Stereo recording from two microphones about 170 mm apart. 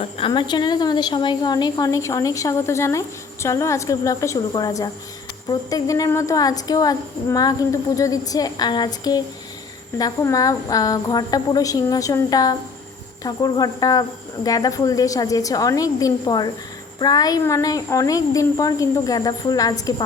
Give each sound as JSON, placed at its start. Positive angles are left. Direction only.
{"t": 0.0, "sound": "a woman's voice", "side_deg": 30}